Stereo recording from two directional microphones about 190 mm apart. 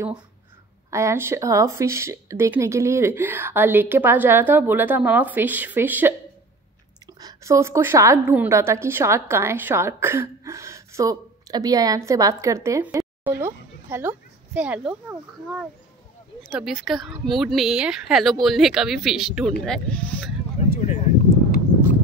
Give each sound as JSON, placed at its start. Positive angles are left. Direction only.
{"t": 0.8, "sound": "speech", "side_deg": -15}
{"t": 7.2, "sound": "a woman's voice", "side_deg": -20}
{"t": 16.4, "sound": "a woman's voice", "side_deg": 0}
{"t": 20.7, "sound": "a sound", "side_deg": 40}